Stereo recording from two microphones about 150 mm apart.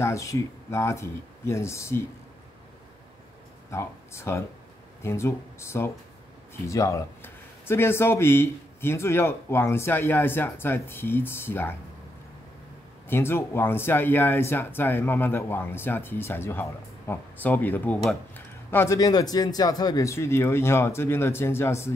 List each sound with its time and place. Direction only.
0.0 s speech: 20° left (ahead or behind)
3.7 s speech: 15° left (ahead or behind)
13.1 s speech: 15° left (ahead or behind)